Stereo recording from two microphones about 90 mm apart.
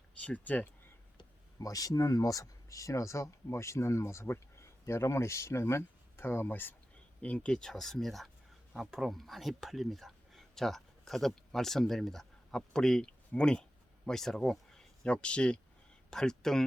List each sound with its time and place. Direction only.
0.2 s speech: 15° left (ahead or behind)
1.5 s speech: 40° left (ahead or behind); by 16.6 s 5° left (ahead or behind)